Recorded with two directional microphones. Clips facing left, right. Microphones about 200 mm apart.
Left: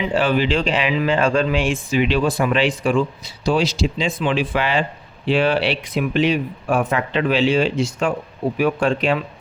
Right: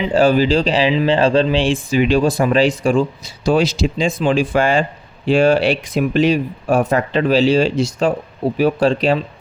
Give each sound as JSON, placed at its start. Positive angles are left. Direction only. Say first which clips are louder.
{"t": 0.1, "sound": "speech", "louder": "right 7 dB", "side_deg": -40}